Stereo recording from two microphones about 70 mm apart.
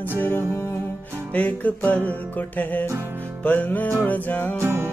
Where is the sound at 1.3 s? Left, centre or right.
Left.